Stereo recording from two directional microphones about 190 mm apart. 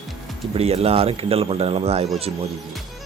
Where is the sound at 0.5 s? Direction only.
30° right (ahead or behind).